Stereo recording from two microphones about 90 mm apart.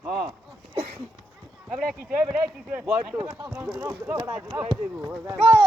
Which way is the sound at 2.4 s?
20° right (ahead or behind).